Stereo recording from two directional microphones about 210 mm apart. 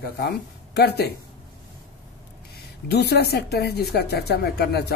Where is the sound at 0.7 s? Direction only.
50° left (ahead or behind).